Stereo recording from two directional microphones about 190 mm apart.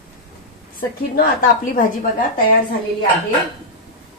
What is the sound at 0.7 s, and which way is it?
A woman's voice, 45° left (ahead or behind).